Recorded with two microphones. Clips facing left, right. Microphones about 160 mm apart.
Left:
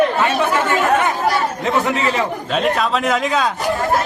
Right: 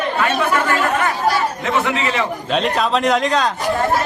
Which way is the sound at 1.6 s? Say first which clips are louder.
Left 1 dB; 40° left (ahead or behind).